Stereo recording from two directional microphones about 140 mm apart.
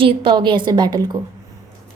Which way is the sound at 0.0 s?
40° right (ahead or behind).